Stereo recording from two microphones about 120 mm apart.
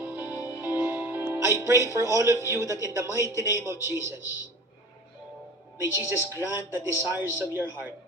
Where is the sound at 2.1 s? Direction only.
25° right (ahead or behind).